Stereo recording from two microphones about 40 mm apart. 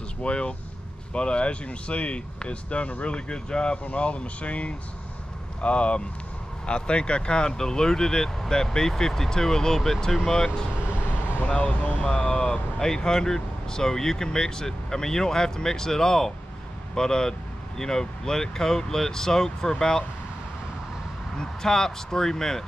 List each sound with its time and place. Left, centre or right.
0.2 s speech: left; by 10.5 s centre
11.4 s speech: left; by 20.1 s centre
21.4 s speech: centre